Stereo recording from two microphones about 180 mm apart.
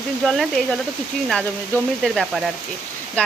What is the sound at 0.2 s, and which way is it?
Speech, centre (ahead or behind).